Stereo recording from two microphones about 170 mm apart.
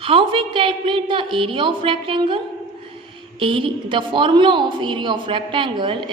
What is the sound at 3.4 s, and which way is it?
A woman's voice, 30° right (ahead or behind).